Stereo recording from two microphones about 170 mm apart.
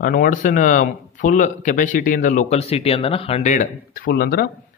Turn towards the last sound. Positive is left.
turn(degrees=60)  # may be behind; listen again after turning